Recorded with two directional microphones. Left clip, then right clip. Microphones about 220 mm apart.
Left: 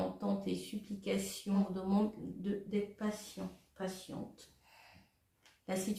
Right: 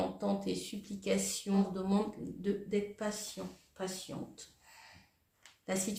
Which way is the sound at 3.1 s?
45° right (ahead or behind).